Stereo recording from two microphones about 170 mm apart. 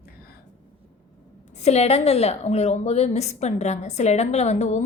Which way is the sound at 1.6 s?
40° left (ahead or behind).